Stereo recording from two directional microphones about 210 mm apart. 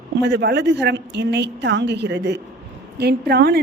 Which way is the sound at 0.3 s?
55° right (ahead or behind).